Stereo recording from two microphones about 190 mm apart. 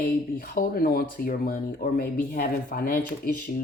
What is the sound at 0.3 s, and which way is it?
Speech, 50° left (ahead or behind).